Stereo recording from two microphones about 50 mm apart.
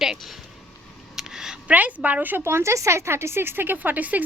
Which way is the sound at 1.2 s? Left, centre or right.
Centre.